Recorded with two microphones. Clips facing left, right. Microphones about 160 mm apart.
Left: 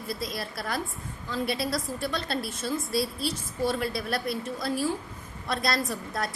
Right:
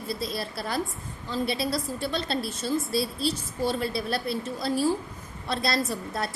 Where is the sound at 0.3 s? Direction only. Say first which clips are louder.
Right 2 dB; 30° right (ahead or behind).